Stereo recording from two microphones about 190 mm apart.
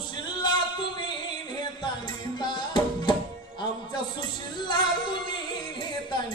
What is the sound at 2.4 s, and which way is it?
Music, 25° left (ahead or behind).